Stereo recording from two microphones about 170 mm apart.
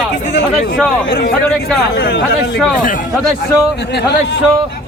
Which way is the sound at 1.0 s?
65° left (ahead or behind).